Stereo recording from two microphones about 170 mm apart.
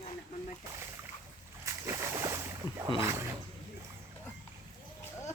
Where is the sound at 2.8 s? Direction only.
20° right (ahead or behind).